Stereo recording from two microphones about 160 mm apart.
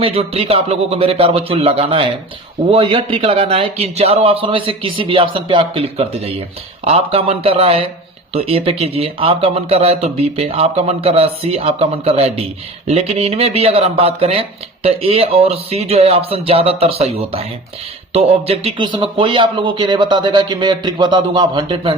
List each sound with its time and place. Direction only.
0.0 s speech: 40° right (ahead or behind)